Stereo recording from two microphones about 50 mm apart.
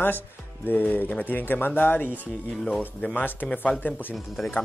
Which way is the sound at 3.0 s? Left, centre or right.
Left.